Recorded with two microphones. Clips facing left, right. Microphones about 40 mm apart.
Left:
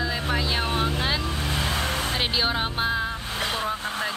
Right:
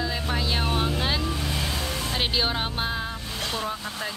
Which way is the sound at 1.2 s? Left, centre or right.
Left.